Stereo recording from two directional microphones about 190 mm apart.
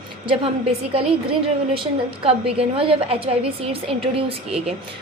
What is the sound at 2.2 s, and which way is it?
A woman's voice, 30° right (ahead or behind).